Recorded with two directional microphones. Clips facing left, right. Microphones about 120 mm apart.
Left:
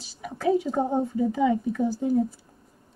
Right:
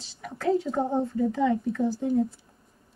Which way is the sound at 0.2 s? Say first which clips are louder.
Left 2 dB; 5° left (ahead or behind).